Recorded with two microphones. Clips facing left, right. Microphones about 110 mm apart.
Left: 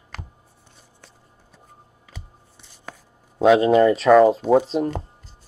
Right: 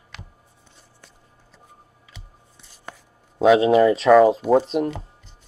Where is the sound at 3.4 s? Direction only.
Centre (ahead or behind).